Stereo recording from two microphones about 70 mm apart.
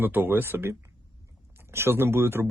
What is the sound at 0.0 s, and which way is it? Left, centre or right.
Speech, right.